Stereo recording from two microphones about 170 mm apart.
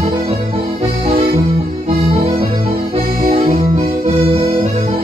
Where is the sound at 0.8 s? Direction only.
40° right (ahead or behind).